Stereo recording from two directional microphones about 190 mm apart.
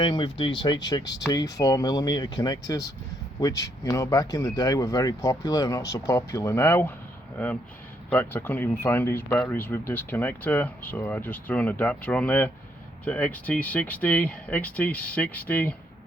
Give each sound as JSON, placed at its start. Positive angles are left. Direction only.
{"t": 0.0, "sound": "speech", "side_deg": 25}